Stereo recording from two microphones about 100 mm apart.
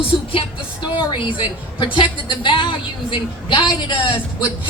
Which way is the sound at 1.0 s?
55° left (ahead or behind).